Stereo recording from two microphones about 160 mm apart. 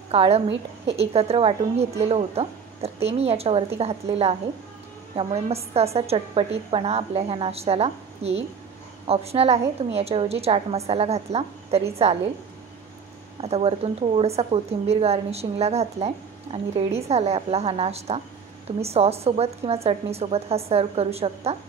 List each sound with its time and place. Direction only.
0.1 s a woman's voice: 40° right (ahead or behind)
13.4 s a woman's voice: 40° right (ahead or behind)